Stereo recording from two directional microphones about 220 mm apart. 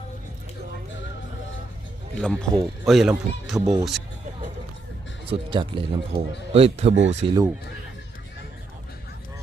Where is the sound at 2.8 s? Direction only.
Centre (ahead or behind).